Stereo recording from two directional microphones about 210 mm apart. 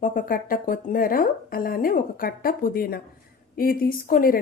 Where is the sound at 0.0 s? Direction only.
40° left (ahead or behind).